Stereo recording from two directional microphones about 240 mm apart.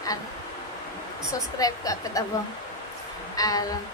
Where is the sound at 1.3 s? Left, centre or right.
Centre.